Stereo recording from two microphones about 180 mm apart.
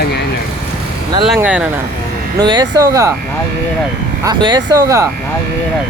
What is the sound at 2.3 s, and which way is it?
Speech, 25° right (ahead or behind).